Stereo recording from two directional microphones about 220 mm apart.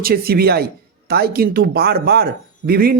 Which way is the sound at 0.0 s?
45° right (ahead or behind).